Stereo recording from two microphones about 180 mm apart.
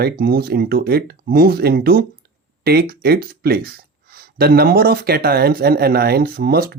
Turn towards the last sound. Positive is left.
turn(degrees=-60)  # may be behind; listen again after turning